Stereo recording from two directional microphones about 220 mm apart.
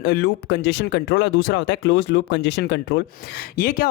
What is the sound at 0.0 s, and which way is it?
Speech, 50° left (ahead or behind).